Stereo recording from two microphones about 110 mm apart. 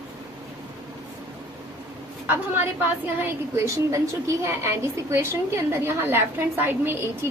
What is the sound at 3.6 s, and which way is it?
A woman's voice, 25° right (ahead or behind).